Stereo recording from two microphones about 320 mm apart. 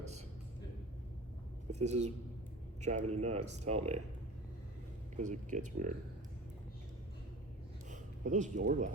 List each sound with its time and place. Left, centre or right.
1.7 s speech: right
5.1 s speech: right
7.9 s speech: right